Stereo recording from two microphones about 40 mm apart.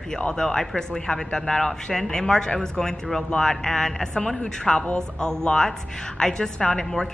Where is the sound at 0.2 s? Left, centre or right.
Centre.